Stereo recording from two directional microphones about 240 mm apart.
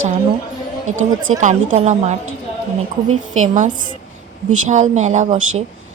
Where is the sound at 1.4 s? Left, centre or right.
Right.